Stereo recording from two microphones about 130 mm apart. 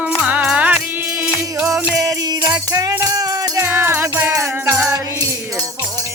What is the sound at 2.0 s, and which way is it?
Music, 30° right (ahead or behind).